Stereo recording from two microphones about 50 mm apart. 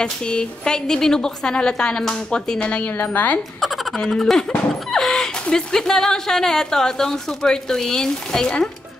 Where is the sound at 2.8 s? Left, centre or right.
Left.